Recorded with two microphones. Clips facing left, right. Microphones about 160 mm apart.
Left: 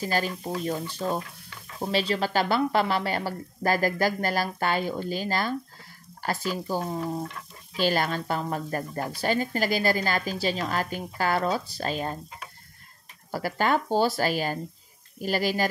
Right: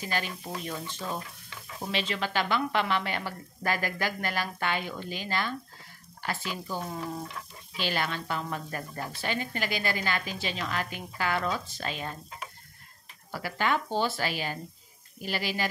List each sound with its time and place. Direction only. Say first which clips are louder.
0.0 s speech: left 6 dB; 40° left (ahead or behind)
6.7 s speech: left 4 dB; 30° left (ahead or behind)
7.7 s speech: left 6 dB; 40° left (ahead or behind)
13.3 s speech: left 4 dB; 40° left (ahead or behind)